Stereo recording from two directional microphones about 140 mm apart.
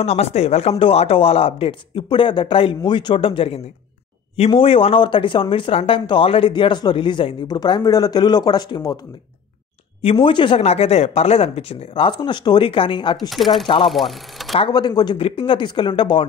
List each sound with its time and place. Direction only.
0.0 s speech: 50° left (ahead or behind); by 9.0 s 30° left (ahead or behind)
10.1 s speech: 35° left (ahead or behind)
13.3 s speech: centre (ahead or behind)
14.7 s speech: 30° left (ahead or behind)